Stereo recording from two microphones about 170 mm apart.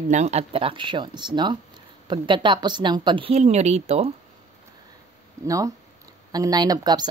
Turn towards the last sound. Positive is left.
turn(degrees=-25)  # may be behind; listen again after turning